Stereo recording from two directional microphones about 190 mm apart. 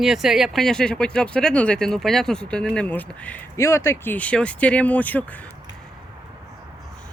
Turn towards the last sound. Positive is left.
turn(degrees=10)  # may be behind; listen again after turning